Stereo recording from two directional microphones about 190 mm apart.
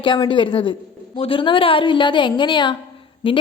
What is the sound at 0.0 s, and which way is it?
A woman's voice, 25° left (ahead or behind).